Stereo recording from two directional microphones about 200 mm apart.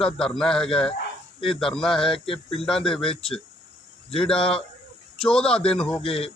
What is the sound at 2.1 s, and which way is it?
Speech, 25° left (ahead or behind).